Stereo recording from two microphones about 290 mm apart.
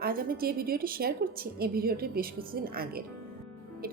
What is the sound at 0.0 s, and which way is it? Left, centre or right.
A woman's voice, right.